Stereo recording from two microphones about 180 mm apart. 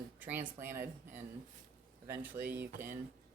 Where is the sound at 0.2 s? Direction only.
10° right (ahead or behind).